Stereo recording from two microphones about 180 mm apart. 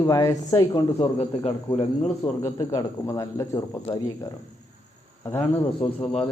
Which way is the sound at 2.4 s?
15° left (ahead or behind).